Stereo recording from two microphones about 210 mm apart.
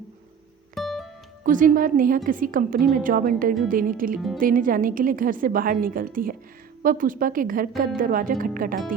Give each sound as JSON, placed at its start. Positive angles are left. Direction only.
{"t": 0.8, "sound": "music", "side_deg": 0}
{"t": 1.5, "sound": "a woman's voice", "side_deg": -40}